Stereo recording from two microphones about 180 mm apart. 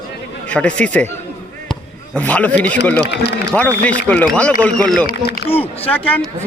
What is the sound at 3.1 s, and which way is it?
Speech, 70° left (ahead or behind).